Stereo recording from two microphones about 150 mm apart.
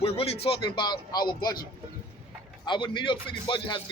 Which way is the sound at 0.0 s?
40° left (ahead or behind).